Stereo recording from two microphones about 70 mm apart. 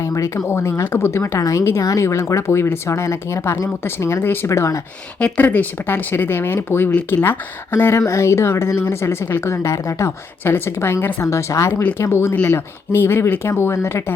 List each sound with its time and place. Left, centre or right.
0.0 s a sound: left
0.4 s speech: left
5.2 s speech: left
10.4 s speech: left
12.3 s speech: left